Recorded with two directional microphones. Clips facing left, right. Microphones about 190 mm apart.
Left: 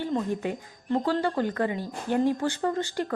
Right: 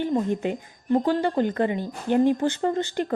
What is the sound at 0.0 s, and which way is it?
A woman's voice, 20° right (ahead or behind).